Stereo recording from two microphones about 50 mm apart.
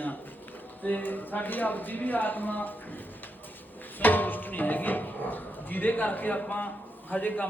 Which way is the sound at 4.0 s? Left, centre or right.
Left.